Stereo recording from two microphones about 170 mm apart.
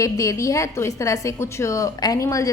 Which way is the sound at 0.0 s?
20° left (ahead or behind).